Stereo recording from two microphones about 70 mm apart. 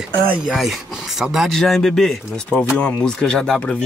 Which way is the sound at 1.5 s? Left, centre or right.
Centre.